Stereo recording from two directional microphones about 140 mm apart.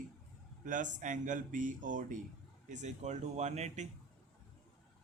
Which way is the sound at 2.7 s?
55° right (ahead or behind).